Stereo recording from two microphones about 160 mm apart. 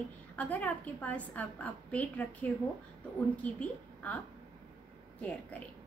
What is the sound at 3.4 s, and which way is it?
Speech, 10° left (ahead or behind).